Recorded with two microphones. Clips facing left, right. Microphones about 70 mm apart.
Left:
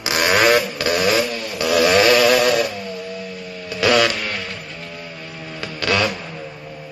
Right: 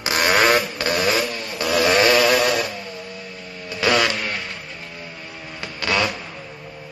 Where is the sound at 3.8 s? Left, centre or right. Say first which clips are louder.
Left 3 dB; right.